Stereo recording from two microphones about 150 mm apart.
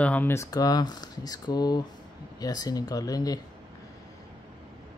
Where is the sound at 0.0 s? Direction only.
10° left (ahead or behind).